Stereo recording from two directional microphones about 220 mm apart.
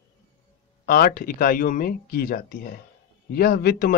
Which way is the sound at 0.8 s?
40° left (ahead or behind).